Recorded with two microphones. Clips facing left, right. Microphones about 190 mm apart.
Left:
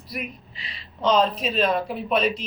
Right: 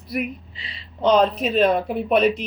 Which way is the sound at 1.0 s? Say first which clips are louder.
Right 3 dB; 60° right (ahead or behind).